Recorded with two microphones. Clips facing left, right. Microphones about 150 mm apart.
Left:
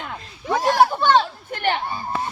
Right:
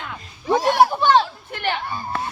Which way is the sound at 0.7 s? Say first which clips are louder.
Even; 10° right (ahead or behind).